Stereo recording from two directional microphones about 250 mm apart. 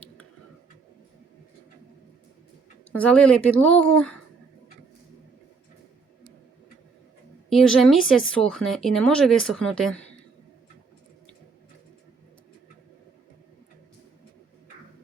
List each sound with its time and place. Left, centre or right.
2.9 s speech: centre
7.5 s speech: centre